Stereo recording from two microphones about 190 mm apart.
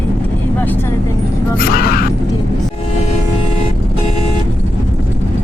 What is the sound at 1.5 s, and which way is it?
Speech, 50° left (ahead or behind).